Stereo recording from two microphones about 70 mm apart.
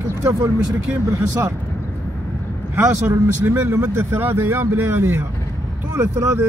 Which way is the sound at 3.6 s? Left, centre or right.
Right.